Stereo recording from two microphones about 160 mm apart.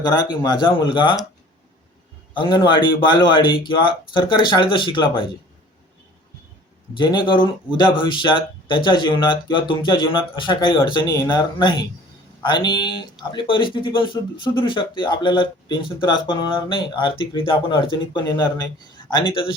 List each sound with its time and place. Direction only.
0.0 s a man's voice: 25° left (ahead or behind)
2.3 s a man's voice: 30° left (ahead or behind)
6.9 s a man's voice: 30° left (ahead or behind)